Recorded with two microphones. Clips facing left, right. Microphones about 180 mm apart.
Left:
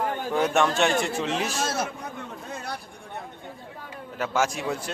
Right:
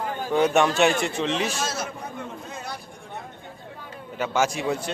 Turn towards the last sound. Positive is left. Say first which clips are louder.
# right 3 dB
turn(degrees=0)  # may be behind; listen again after turning